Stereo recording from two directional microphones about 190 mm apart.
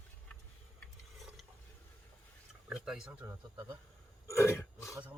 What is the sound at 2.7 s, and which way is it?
Speech, 5° right (ahead or behind).